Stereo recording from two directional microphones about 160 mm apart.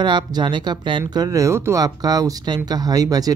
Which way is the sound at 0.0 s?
30° right (ahead or behind).